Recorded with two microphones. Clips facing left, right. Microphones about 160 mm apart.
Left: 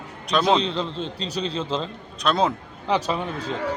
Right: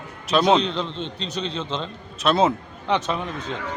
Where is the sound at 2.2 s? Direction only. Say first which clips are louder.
Right 3 dB; 5° right (ahead or behind).